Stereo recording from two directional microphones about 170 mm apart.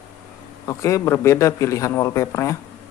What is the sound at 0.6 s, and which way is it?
A man's voice, 20° left (ahead or behind).